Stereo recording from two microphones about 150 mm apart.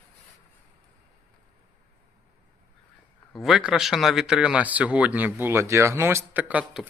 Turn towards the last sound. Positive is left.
turn(degrees=-10)  # may be behind; listen again after turning